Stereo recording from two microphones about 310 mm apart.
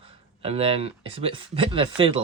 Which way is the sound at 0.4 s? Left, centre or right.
Centre.